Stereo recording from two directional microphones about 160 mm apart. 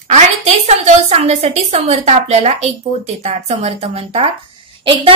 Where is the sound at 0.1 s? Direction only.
45° right (ahead or behind).